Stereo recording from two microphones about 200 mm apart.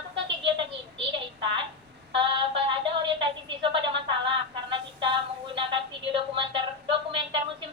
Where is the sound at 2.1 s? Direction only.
25° right (ahead or behind).